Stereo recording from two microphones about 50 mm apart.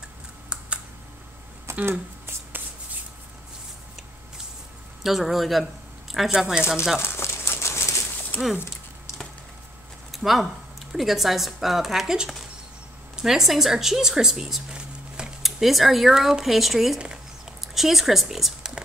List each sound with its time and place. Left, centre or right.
0.5 s computer keyboard: right
1.7 s a sound: right
5.0 s speech: centre
6.3 s speech: centre
7.0 s bird: left
8.3 s speech: left
10.1 s speech: centre
15.4 s a woman's voice: centre